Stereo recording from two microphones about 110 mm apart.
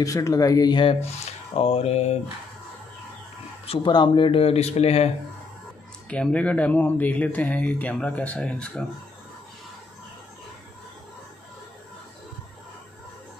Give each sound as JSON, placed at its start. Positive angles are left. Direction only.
{"t": 0.0, "sound": "speech", "side_deg": 30}
{"t": 1.5, "sound": "speech", "side_deg": 65}
{"t": 3.6, "sound": "speech", "side_deg": 55}
{"t": 3.9, "sound": "speech", "side_deg": 45}
{"t": 6.0, "sound": "speech", "side_deg": 10}